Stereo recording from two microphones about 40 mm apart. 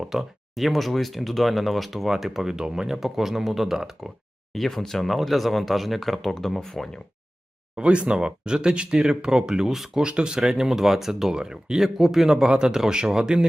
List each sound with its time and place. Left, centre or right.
0.0 s speech: centre
4.5 s speech: centre
7.8 s speech: right; by 10.0 s centre
10.0 s speech: right